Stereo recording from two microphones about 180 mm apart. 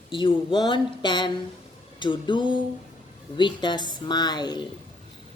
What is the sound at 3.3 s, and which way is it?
A woman's voice, 25° left (ahead or behind).